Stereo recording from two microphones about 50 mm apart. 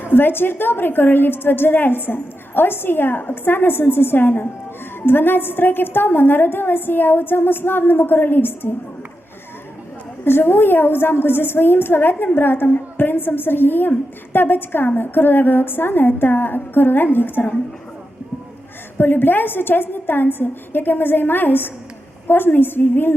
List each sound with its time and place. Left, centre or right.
0.0 s a woman's voice: left
10.2 s a woman's voice: left
18.9 s a woman's voice: left